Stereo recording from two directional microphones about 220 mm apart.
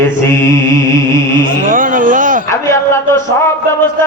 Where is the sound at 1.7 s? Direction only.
40° right (ahead or behind).